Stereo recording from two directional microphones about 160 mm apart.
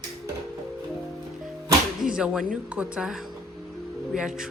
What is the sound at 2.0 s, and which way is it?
Music, 5° right (ahead or behind).